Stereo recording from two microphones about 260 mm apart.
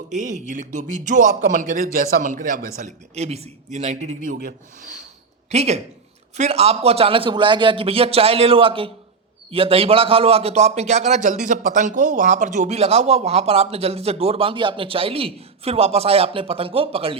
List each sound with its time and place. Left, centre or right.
0.1 s a man's voice: right